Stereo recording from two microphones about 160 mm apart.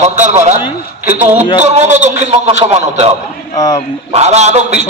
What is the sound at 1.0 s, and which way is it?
A man's voice, 45° right (ahead or behind).